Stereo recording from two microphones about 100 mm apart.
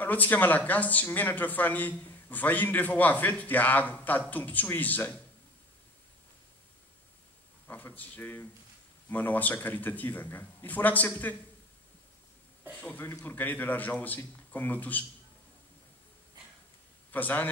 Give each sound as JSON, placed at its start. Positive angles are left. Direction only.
{"t": 0.0, "sound": "speech", "side_deg": 20}
{"t": 7.6, "sound": "speech", "side_deg": 20}
{"t": 12.7, "sound": "speech", "side_deg": 10}
{"t": 13.0, "sound": "speech", "side_deg": 20}
{"t": 17.1, "sound": "speech", "side_deg": 20}